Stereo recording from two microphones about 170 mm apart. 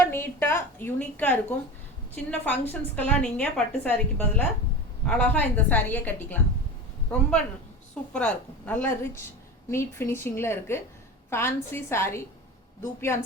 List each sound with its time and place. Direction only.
0.0 s a woman's voice: 15° left (ahead or behind)